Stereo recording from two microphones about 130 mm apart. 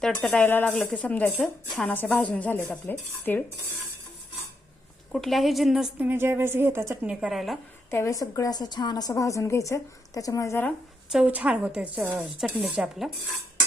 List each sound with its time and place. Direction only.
0.0 s speech: 10° left (ahead or behind)
5.1 s a woman's voice: centre (ahead or behind)
6.1 s speech: 20° right (ahead or behind); by 7.6 s centre (ahead or behind)
7.9 s a woman's voice: 20° left (ahead or behind)
11.1 s speech: 10° right (ahead or behind)